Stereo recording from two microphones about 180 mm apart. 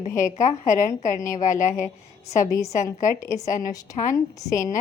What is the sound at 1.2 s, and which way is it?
Speech, 45° left (ahead or behind).